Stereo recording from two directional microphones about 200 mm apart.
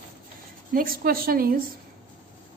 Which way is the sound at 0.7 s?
45° right (ahead or behind).